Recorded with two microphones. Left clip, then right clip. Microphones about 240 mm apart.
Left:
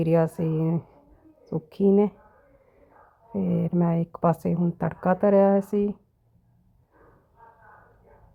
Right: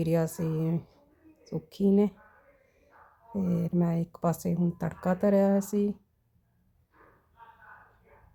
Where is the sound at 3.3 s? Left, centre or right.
Centre.